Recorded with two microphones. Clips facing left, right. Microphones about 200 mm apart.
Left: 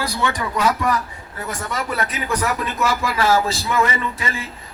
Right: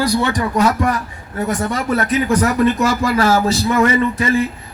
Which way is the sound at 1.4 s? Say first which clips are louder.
Right 7 dB; 45° right (ahead or behind).